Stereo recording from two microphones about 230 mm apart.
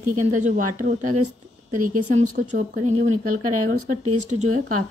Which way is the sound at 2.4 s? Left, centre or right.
Right.